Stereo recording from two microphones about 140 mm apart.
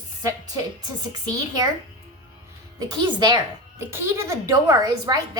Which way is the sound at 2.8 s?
30° right (ahead or behind).